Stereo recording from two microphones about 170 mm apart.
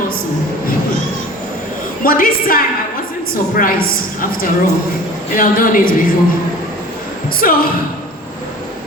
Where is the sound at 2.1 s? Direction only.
55° left (ahead or behind).